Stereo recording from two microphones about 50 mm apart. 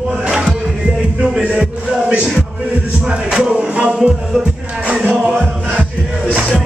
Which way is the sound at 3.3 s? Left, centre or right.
Centre.